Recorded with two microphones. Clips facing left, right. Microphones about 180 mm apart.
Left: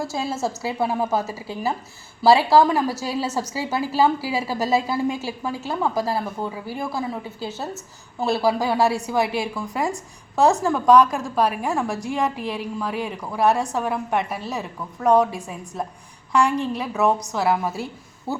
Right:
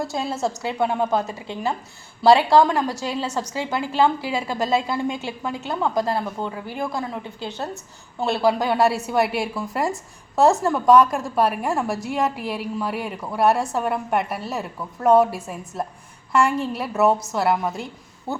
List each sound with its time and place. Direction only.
0.0 s a woman's voice: centre (ahead or behind)
18.3 s speech: 20° right (ahead or behind)